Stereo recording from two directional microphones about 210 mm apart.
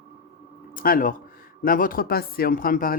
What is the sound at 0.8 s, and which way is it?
Speech, 40° left (ahead or behind).